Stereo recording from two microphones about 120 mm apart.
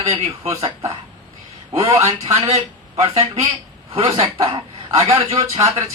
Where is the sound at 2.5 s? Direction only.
55° right (ahead or behind).